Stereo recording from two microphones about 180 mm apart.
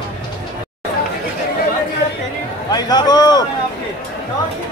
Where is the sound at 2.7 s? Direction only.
20° left (ahead or behind).